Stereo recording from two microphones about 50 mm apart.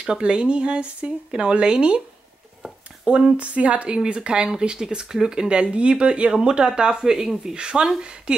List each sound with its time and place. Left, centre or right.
0.0 s speech: centre
3.1 s speech: right